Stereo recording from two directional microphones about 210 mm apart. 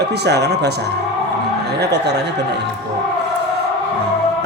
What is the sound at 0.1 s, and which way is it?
Speech, 50° right (ahead or behind).